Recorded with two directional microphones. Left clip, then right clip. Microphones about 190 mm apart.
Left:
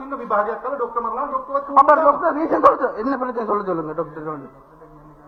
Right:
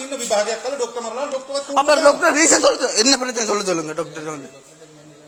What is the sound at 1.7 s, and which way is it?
A man's voice, 5° right (ahead or behind).